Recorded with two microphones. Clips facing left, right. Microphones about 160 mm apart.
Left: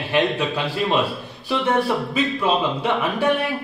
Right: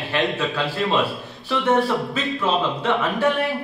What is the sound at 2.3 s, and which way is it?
Speech, 15° left (ahead or behind).